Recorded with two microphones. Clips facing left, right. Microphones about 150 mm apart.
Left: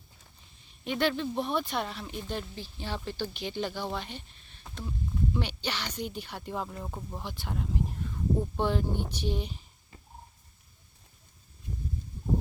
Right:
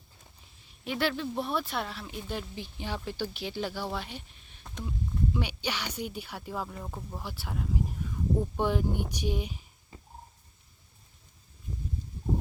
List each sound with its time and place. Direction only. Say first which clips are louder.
0.9 s speech: left 2 dB; 5° right (ahead or behind)
7.2 s speech: left 1 dB; 5° right (ahead or behind)